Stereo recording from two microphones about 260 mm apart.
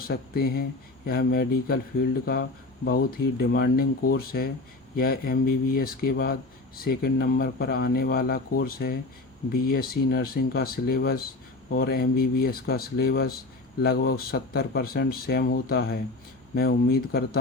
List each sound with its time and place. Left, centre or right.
0.0 s speech: left